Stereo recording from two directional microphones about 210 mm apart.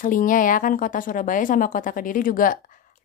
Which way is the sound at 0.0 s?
40° left (ahead or behind).